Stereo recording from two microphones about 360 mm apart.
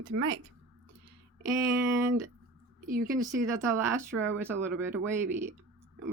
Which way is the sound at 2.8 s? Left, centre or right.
Right.